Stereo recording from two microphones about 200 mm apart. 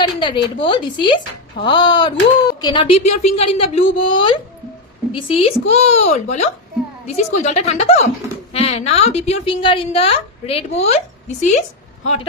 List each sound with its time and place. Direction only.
0.2 s a woman's voice: 25° left (ahead or behind)